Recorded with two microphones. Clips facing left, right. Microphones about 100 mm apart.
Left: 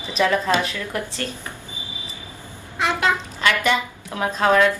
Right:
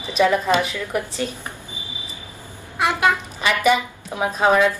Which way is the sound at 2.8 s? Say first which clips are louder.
Right 2 dB; 20° right (ahead or behind).